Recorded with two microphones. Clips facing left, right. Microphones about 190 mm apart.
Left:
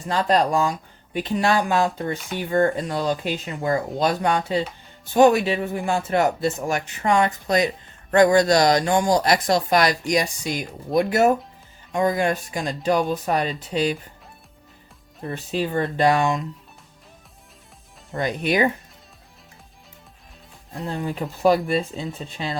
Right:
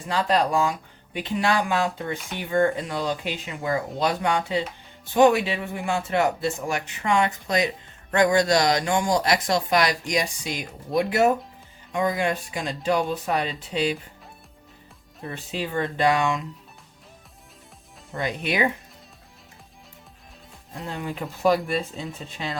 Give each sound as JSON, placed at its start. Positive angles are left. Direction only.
{"t": 0.1, "sound": "speech", "side_deg": 40}
{"t": 15.3, "sound": "speech", "side_deg": 40}
{"t": 18.1, "sound": "speech", "side_deg": 40}
{"t": 20.9, "sound": "speech", "side_deg": 35}